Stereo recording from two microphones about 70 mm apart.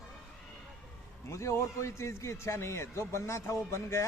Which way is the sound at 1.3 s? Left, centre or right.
Left.